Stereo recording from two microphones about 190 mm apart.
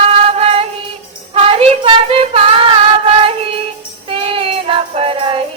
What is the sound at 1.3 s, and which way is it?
Child singing, 30° right (ahead or behind).